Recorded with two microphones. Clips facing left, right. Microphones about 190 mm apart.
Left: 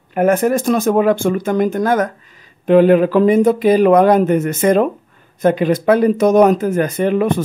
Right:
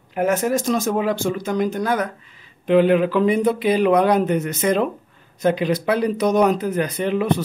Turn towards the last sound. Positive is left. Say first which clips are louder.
# left 5 dB
turn(degrees=50)  # may be behind; listen again after turning